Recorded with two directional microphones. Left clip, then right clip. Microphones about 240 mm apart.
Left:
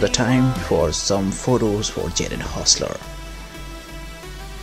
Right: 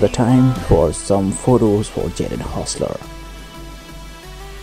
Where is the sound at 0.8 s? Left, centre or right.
Centre.